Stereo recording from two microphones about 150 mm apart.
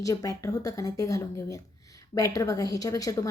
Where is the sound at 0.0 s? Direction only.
25° left (ahead or behind).